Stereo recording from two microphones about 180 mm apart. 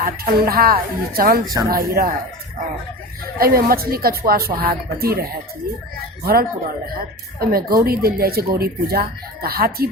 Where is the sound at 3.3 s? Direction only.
55° right (ahead or behind).